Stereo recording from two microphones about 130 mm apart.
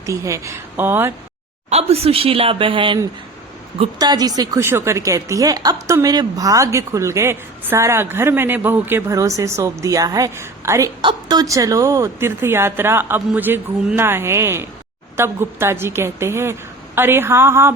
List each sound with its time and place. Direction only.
0.0 s a woman's voice: 25° right (ahead or behind)
1.7 s speech: 50° right (ahead or behind)
3.9 s a woman's voice: 30° right (ahead or behind)